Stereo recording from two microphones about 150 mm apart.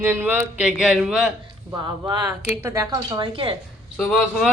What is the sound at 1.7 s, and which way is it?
A woman's voice, 25° right (ahead or behind).